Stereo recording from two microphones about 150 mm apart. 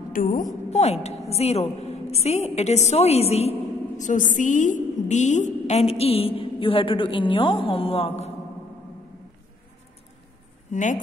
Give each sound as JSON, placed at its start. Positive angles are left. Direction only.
{"t": 0.1, "sound": "a woman's voice", "side_deg": 65}
{"t": 0.7, "sound": "a woman's voice", "side_deg": 45}
{"t": 10.7, "sound": "speech", "side_deg": 55}